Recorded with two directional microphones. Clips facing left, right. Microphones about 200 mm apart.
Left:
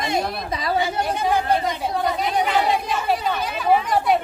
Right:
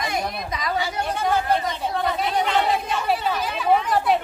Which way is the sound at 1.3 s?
15° left (ahead or behind).